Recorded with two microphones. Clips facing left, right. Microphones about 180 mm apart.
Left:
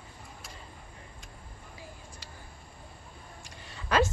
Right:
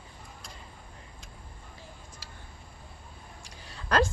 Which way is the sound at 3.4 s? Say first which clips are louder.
Right 1 dB; centre (ahead or behind).